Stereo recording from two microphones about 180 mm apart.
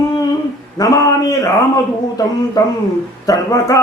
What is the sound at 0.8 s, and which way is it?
Speech, 20° left (ahead or behind).